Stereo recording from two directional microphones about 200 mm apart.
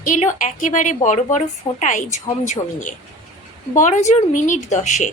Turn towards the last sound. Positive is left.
turn(degrees=35)  # may be behind; listen again after turning